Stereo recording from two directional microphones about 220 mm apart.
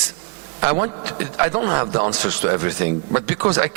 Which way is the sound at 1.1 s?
15° right (ahead or behind).